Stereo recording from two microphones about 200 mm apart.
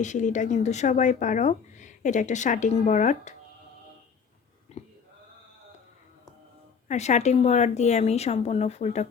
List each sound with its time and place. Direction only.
0.0 s speech: 35° left (ahead or behind)
6.8 s speech: 35° left (ahead or behind)